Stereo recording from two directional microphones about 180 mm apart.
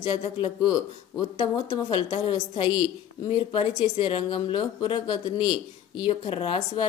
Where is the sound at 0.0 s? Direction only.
25° left (ahead or behind).